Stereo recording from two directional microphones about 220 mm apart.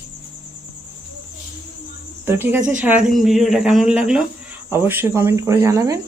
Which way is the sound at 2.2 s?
10° right (ahead or behind).